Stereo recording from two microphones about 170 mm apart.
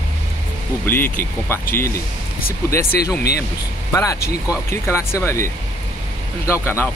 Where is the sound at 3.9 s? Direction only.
20° left (ahead or behind).